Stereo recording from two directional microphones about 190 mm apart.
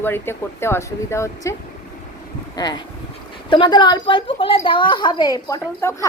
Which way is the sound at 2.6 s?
20° left (ahead or behind).